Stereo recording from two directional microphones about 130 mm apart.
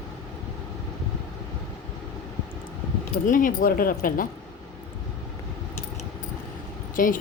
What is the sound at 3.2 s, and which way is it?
Speech, 90° left.